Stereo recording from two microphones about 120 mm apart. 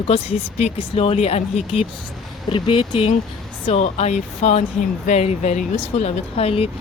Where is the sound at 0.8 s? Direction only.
55° left (ahead or behind).